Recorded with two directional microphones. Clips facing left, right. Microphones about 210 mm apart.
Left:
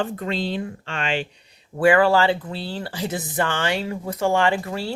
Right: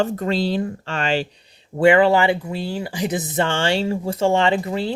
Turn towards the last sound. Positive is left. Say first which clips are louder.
# right 3 dB
turn(degrees=-20)  # may be behind; listen again after turning